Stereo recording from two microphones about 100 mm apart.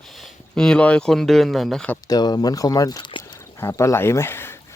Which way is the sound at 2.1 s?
40° left (ahead or behind).